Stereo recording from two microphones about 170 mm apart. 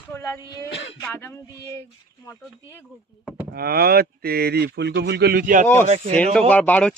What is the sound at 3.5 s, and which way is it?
Speech, 65° right (ahead or behind).